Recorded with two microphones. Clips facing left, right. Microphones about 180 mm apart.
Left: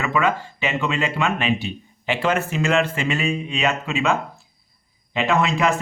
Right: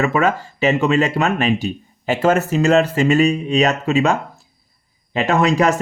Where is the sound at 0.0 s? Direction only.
40° right (ahead or behind).